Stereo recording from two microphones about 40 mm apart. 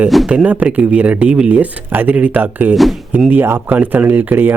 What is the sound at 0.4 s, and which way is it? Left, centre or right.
Speech, right.